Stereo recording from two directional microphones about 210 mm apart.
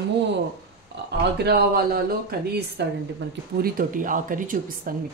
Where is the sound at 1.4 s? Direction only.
50° right (ahead or behind).